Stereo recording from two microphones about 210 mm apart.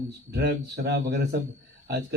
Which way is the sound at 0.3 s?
55° right (ahead or behind).